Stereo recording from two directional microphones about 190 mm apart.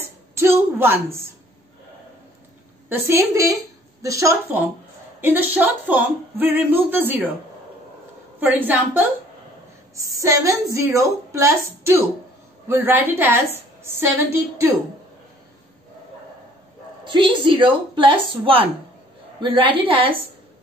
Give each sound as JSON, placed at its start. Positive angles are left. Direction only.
{"t": 0.3, "sound": "speech", "side_deg": -15}
{"t": 2.9, "sound": "speech", "side_deg": -15}
{"t": 8.4, "sound": "speech", "side_deg": -10}
{"t": 17.0, "sound": "a woman's voice", "side_deg": -25}